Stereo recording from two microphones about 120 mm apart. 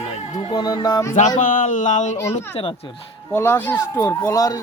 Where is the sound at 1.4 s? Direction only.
90° left.